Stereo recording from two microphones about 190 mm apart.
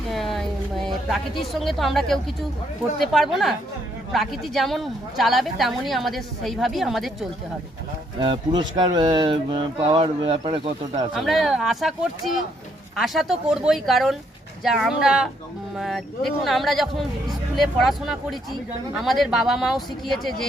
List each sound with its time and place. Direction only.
0.1 s a sound: centre (ahead or behind)
0.9 s a woman's voice: centre (ahead or behind)
8.2 s speech: 25° right (ahead or behind)
11.1 s a woman's voice: centre (ahead or behind)